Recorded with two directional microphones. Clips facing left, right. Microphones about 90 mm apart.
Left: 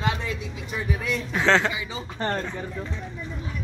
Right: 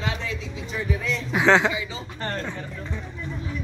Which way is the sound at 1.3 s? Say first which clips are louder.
Right 3 dB; 10° right (ahead or behind).